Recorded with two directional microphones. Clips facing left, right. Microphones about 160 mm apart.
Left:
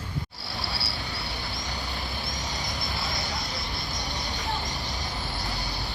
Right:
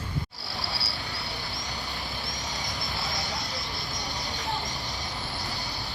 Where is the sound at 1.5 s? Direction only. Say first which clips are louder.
Left 2 dB; centre (ahead or behind).